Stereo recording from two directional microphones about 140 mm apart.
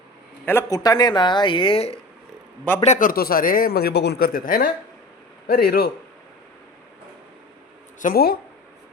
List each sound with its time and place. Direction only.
0.4 s speech: 20° left (ahead or behind); by 2.0 s 45° left (ahead or behind)
2.8 s speech: 65° left (ahead or behind); by 5.8 s 90° left
7.9 s speech: 80° left